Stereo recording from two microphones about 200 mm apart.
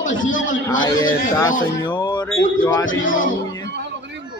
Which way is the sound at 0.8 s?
20° left (ahead or behind).